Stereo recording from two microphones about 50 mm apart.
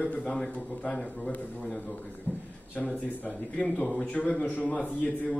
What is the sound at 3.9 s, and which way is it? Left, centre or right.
A man's voice, centre.